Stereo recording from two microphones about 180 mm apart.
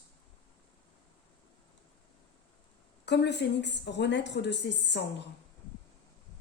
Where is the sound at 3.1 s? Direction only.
70° left (ahead or behind).